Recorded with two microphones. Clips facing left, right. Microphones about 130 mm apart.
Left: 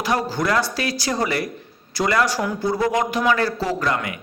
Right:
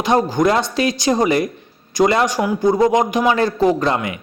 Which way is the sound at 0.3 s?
20° right (ahead or behind).